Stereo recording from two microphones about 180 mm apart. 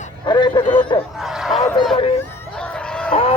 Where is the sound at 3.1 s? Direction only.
35° left (ahead or behind).